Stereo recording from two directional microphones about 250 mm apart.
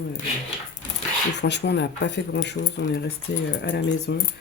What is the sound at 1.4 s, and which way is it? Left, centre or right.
Speech, left.